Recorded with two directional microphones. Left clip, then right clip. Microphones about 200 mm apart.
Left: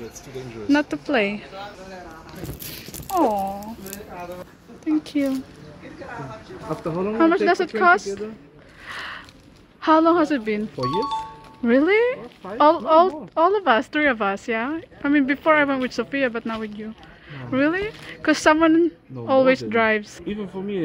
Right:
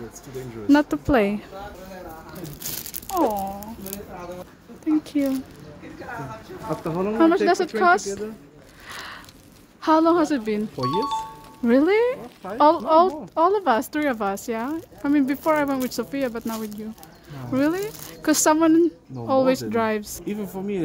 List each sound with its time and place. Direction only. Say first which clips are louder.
0.7 s speech: right 2 dB; 15° right (ahead or behind)
4.8 s speech: even; 10° right (ahead or behind)
6.7 s speech: even; 25° right (ahead or behind)
8.8 s a sound: left 4 dB; 10° right (ahead or behind)
9.8 s speech: left 2 dB; 5° right (ahead or behind)
10.8 s speech: even; centre (ahead or behind)
11.6 s speech: left 1 dB; 15° right (ahead or behind)